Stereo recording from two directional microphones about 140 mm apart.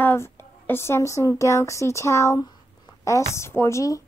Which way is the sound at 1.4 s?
20° left (ahead or behind).